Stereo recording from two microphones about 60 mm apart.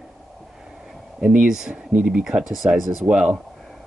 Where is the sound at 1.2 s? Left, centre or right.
Centre.